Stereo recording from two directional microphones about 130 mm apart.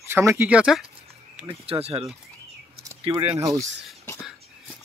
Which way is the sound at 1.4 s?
50° right (ahead or behind).